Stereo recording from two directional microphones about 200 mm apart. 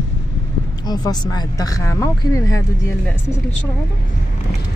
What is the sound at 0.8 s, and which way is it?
Speech, 20° left (ahead or behind).